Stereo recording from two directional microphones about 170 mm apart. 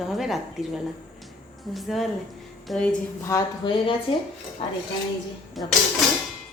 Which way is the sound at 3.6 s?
30° left (ahead or behind).